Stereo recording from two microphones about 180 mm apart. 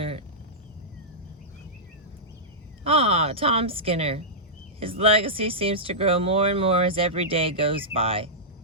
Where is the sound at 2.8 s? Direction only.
30° right (ahead or behind).